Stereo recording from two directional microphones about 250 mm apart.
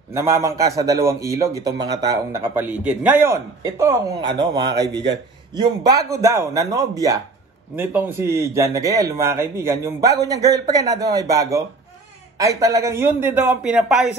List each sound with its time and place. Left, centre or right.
0.1 s a man's voice: centre